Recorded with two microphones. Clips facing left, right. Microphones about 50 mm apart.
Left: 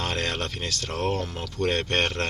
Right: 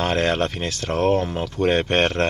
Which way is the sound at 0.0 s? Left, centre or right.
Right.